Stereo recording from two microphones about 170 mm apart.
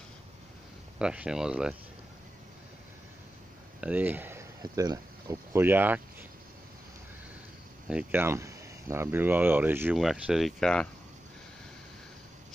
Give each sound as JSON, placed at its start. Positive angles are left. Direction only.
{"t": 0.9, "sound": "speech", "side_deg": -5}
{"t": 3.8, "sound": "speech", "side_deg": -10}
{"t": 7.9, "sound": "speech", "side_deg": -15}